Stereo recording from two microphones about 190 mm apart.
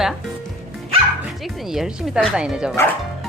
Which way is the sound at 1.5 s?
Centre (ahead or behind).